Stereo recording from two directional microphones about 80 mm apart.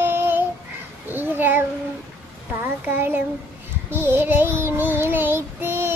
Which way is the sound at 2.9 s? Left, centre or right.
Right.